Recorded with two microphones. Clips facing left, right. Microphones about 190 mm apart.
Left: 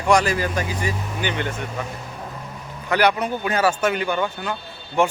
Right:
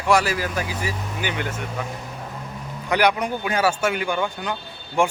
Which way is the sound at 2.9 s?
10° right (ahead or behind).